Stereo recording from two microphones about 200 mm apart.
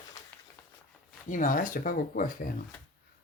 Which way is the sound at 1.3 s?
40° left (ahead or behind).